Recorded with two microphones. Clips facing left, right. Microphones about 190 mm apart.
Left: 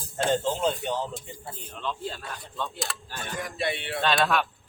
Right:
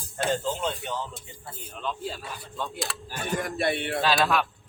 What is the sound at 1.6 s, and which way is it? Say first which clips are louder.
Speech: right 1 dB; centre (ahead or behind).